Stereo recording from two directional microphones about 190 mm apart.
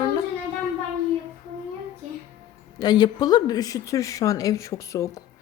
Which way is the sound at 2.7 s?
20° left (ahead or behind).